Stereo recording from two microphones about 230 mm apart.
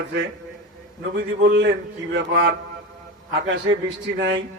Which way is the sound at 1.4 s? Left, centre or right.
Right.